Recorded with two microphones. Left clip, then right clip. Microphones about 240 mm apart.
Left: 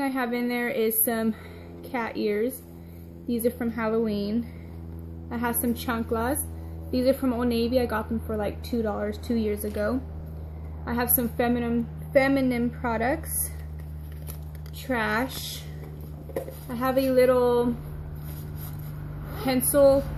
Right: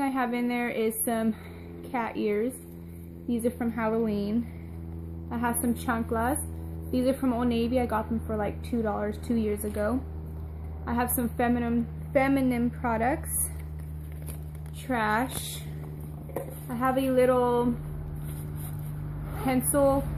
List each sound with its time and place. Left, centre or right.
0.0 s a woman's voice: centre
14.9 s a woman's voice: centre
19.3 s a woman's voice: centre